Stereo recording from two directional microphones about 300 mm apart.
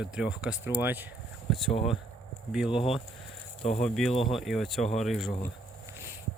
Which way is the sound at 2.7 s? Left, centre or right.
Centre.